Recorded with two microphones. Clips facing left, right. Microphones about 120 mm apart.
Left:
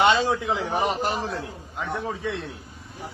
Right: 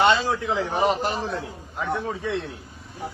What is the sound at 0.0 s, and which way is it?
Speech, 20° left (ahead or behind).